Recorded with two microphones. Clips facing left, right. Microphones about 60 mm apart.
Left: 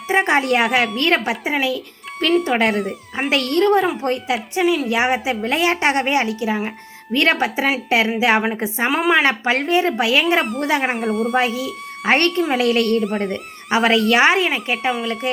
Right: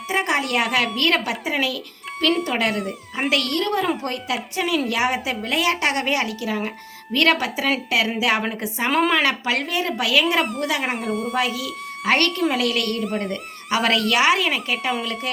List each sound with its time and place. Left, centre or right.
0.1 s speech: left
2.7 s speech: centre
3.5 s speech: left
8.9 s speech: centre
9.2 s speech: left
10.8 s speech: centre
11.3 s speech: left
13.0 s speech: centre
13.7 s speech: left
14.2 s speech: left